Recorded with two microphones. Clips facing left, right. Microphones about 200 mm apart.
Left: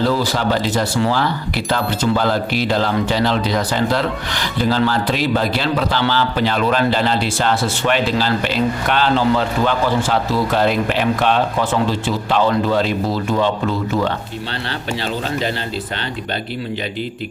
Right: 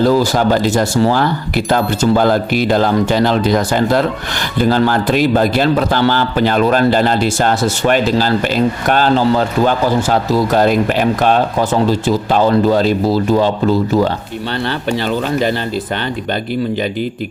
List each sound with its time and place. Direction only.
0.0 s a man's voice: 45° right (ahead or behind)